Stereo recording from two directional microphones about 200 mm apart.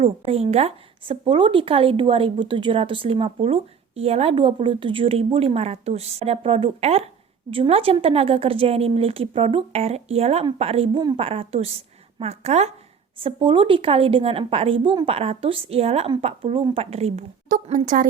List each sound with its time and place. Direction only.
0.0 s a woman's voice: 30° right (ahead or behind)